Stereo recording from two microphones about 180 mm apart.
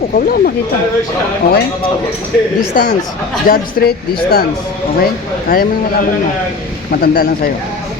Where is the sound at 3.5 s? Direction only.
55° left (ahead or behind).